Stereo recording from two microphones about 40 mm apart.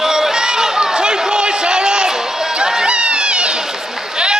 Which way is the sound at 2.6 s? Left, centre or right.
Centre.